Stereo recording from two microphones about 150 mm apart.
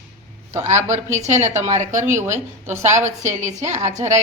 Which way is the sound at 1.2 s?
50° right (ahead or behind).